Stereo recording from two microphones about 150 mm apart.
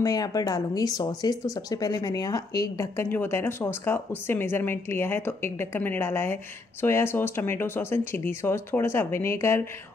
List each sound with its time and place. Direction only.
0.0 s speech: 25° left (ahead or behind)